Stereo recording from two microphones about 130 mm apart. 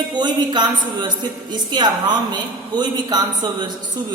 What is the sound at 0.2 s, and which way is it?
A woman's voice, 35° right (ahead or behind).